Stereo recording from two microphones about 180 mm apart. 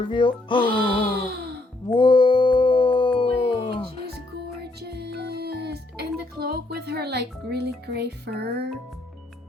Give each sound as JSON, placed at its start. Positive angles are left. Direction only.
{"t": 0.1, "sound": "speech", "side_deg": 25}
{"t": 1.3, "sound": "sigh", "side_deg": -65}
{"t": 2.0, "sound": "a sound", "side_deg": 25}
{"t": 4.8, "sound": "music", "side_deg": -65}